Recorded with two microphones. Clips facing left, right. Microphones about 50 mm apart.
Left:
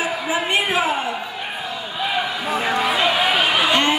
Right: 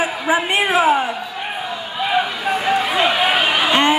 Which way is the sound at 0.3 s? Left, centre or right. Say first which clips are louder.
Right 4 dB; right.